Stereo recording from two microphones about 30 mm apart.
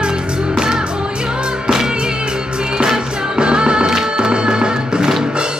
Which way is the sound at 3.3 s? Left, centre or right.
Right.